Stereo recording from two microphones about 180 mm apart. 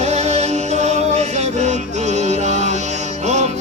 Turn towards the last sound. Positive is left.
turn(degrees=-40)  # may be behind; listen again after turning